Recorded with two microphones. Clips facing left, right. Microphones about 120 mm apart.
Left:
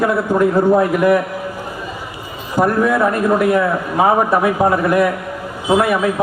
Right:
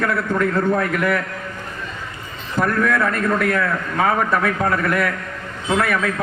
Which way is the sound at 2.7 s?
15° left (ahead or behind).